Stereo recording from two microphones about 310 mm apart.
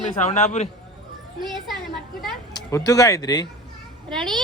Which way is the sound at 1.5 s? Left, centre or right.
Centre.